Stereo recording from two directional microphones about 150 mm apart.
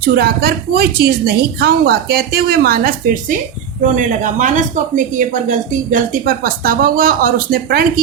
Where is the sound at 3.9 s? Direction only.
55° right (ahead or behind).